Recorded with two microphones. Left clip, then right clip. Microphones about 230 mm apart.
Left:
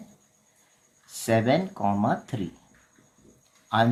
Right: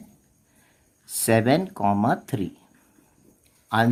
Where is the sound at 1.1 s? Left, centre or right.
Right.